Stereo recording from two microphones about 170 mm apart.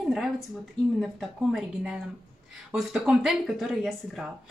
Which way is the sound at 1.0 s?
Centre (ahead or behind).